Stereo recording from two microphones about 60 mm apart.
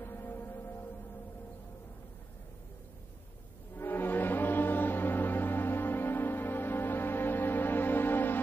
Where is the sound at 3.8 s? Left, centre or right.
Left.